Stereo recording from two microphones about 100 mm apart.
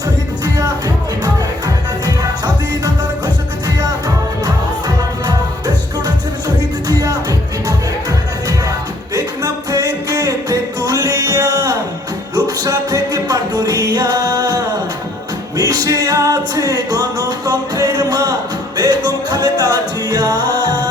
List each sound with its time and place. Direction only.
0.4 s music: 40° right (ahead or behind)
5.2 s music: 40° right (ahead or behind)
9.1 s music: 35° right (ahead or behind)